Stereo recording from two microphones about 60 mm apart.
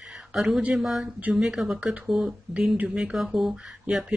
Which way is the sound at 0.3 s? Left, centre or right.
Centre.